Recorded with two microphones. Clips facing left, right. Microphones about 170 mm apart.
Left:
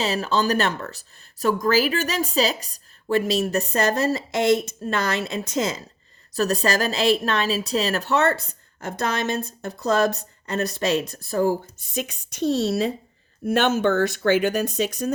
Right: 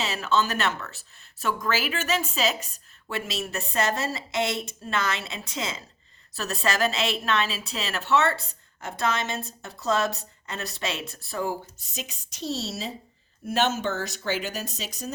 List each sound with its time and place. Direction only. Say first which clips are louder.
0.0 s a woman's voice: left 3 dB; 35° left (ahead or behind)
11.6 s speech: left 9 dB; 55° left (ahead or behind)